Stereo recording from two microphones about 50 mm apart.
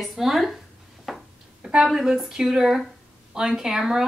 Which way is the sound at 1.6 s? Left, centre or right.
Centre.